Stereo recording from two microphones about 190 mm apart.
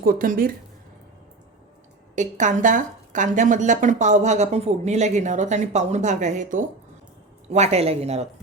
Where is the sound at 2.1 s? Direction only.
40° right (ahead or behind).